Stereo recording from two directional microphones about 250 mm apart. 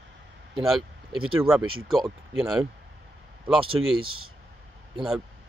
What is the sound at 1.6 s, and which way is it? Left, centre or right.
Speech, right.